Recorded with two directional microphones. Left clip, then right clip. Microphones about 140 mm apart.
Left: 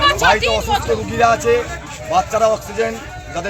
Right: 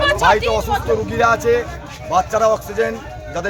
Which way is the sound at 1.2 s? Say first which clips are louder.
Left 2 dB; 25° right (ahead or behind).